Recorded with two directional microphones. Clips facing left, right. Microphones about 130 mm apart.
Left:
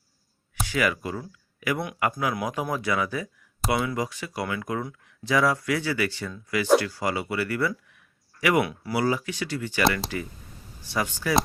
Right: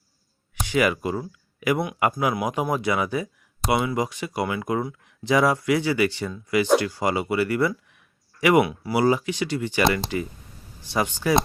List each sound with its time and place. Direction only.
0.6 s speech: 20° right (ahead or behind)